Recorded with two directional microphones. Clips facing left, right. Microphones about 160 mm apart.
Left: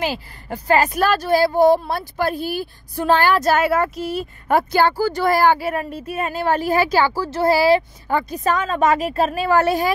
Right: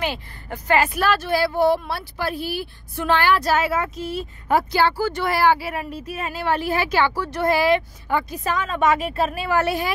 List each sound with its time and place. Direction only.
0.0 s a woman's voice: 35° left (ahead or behind)